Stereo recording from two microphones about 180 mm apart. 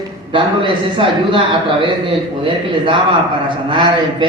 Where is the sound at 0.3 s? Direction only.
25° right (ahead or behind).